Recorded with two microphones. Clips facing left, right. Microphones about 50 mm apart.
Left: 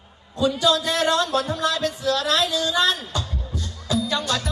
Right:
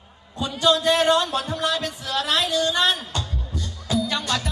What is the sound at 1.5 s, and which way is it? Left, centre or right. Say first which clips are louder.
Speech: left 1 dB; right.